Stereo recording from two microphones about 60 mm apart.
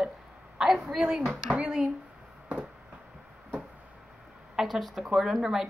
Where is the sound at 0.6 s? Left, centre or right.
Centre.